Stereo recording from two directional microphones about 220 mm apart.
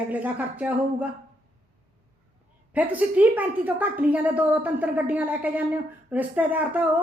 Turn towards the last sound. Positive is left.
turn(degrees=-5)  # may be behind; listen again after turning